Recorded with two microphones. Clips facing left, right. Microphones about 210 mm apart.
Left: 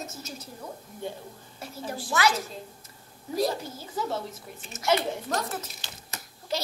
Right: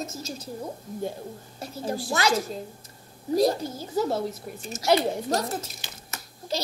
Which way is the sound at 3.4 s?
40° right (ahead or behind).